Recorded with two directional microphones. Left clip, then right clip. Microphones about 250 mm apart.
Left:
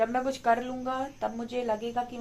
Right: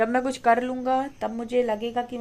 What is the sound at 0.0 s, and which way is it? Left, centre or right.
A woman's voice, right.